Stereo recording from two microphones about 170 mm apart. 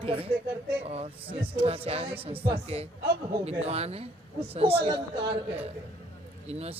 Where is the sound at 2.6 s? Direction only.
35° right (ahead or behind).